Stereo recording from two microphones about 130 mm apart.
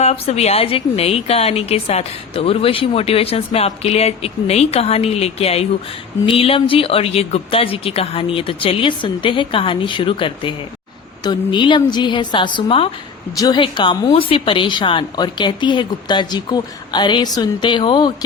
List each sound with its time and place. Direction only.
0.0 s a woman's voice: 55° left (ahead or behind)
13.3 s a woman's voice: 30° left (ahead or behind)